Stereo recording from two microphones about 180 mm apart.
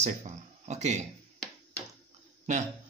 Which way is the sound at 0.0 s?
40° right (ahead or behind).